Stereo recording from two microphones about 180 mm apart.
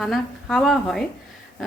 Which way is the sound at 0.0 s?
Centre (ahead or behind).